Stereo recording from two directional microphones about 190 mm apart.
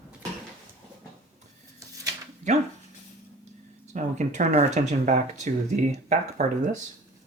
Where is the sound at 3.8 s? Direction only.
40° right (ahead or behind).